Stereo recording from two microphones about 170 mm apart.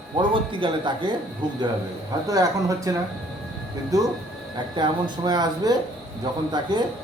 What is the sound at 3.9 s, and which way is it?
Speech, 20° right (ahead or behind).